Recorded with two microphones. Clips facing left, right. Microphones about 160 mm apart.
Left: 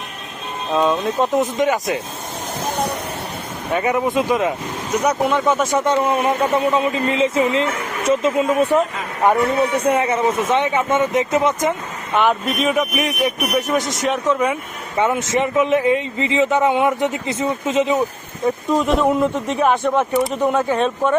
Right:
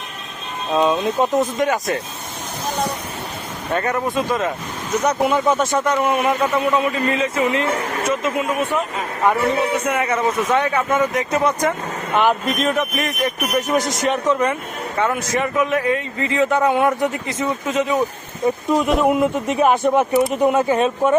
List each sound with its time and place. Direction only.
0.7 s speech: 5° right (ahead or behind)
1.4 s speech: 20° left (ahead or behind)
3.7 s speech: 5° left (ahead or behind)
5.2 s speech: centre (ahead or behind)
5.8 s a man's voice: 30° left (ahead or behind)
12.1 s speech: centre (ahead or behind)
14.9 s a man's voice: 20° left (ahead or behind)
18.4 s speech: 5° right (ahead or behind)